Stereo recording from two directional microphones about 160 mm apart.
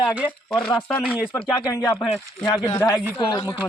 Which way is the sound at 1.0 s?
10° right (ahead or behind).